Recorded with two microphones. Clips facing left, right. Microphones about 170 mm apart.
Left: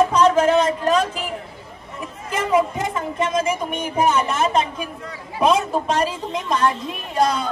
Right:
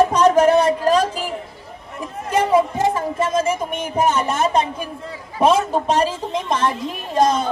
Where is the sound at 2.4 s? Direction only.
30° right (ahead or behind).